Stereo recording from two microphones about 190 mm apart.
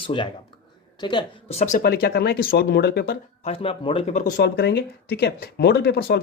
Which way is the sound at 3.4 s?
30° left (ahead or behind).